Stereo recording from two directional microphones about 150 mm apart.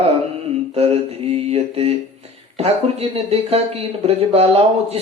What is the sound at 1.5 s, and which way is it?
Speech, 45° right (ahead or behind).